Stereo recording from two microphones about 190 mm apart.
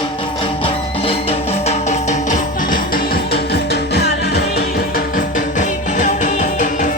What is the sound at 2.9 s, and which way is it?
Music, 55° left (ahead or behind).